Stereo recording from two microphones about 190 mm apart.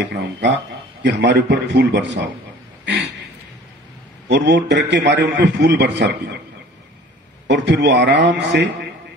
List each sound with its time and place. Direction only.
0.0 s a man's voice: 65° right (ahead or behind)
2.8 s a sound: 70° right (ahead or behind)
4.3 s a man's voice: 65° right (ahead or behind)
7.4 s a man's voice: 65° right (ahead or behind)